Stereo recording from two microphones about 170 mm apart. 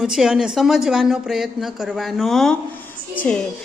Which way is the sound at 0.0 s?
Centre (ahead or behind).